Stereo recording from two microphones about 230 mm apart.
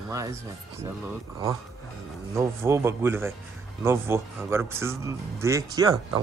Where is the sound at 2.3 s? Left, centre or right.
Centre.